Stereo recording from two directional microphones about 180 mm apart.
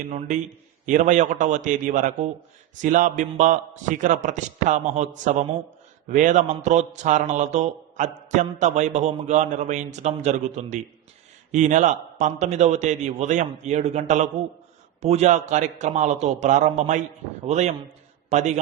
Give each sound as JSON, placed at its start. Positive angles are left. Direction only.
{"t": 0.1, "sound": "a man's voice", "side_deg": -40}